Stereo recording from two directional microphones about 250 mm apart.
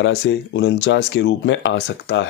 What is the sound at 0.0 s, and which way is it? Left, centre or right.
Speech, left.